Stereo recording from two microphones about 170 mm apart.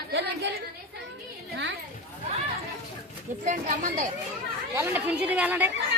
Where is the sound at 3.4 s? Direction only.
50° right (ahead or behind).